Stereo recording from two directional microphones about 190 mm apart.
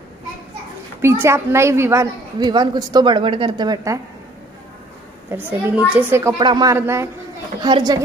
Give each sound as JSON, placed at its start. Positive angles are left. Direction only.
{"t": 1.0, "sound": "a woman's voice", "side_deg": -15}
{"t": 5.3, "sound": "a woman's voice", "side_deg": -10}